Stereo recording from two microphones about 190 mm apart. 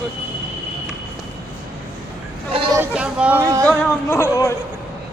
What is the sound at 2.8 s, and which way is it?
Speech, 5° right (ahead or behind).